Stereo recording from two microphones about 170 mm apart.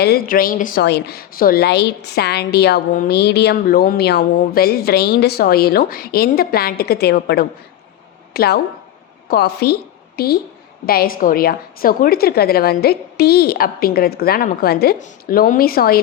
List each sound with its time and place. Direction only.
0.0 s a woman's voice: 65° left (ahead or behind)
3.2 s a woman's voice: 80° left
14.9 s a woman's voice: 55° left (ahead or behind)